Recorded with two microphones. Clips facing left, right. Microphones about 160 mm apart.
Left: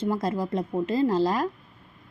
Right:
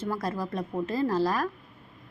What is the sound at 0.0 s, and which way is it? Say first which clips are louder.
A woman's voice: left 4 dB; 20° left (ahead or behind).